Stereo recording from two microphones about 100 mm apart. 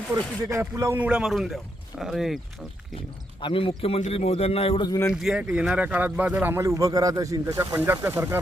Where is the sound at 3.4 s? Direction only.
65° left (ahead or behind).